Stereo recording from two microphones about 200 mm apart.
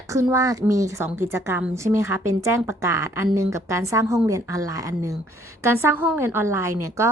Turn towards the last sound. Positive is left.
turn(degrees=-15)  # may be behind; listen again after turning